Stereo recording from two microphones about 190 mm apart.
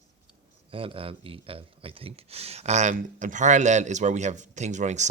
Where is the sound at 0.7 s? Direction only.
30° right (ahead or behind).